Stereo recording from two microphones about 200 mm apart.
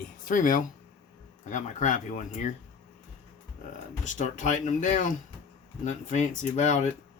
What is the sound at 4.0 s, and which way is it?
Speech, 40° left (ahead or behind).